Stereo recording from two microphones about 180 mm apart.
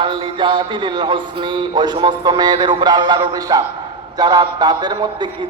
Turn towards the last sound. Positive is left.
turn(degrees=-25)  # may be behind; listen again after turning